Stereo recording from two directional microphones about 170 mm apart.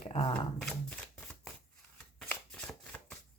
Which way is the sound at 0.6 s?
5° left (ahead or behind).